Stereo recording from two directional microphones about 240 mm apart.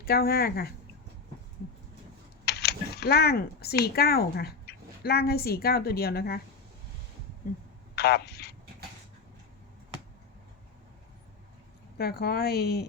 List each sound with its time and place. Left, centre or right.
0.0 s a woman's voice: left
2.4 s speech: left
7.9 s telephone: left
11.9 s a woman's voice: left